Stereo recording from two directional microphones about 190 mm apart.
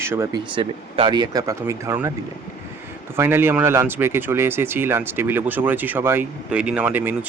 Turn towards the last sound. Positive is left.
turn(degrees=-10)  # may be behind; listen again after turning